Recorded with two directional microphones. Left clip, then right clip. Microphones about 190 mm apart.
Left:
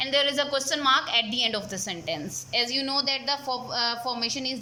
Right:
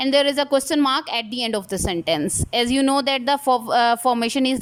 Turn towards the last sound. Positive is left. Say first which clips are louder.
# right 8 dB
turn(degrees=-40)  # may be behind; listen again after turning